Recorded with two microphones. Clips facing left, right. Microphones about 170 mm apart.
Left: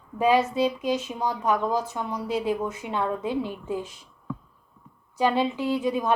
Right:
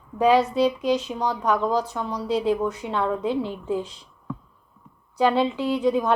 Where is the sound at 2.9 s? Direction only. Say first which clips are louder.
Right 2 dB; 15° left (ahead or behind).